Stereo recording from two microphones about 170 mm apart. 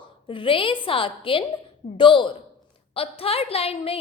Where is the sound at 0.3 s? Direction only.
30° left (ahead or behind).